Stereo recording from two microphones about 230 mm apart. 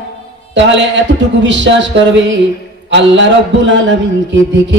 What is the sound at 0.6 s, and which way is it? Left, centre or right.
Mantra, right.